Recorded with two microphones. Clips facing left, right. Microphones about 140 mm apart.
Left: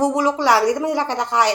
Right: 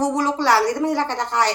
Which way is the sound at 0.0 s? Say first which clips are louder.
Left 2 dB; 10° left (ahead or behind).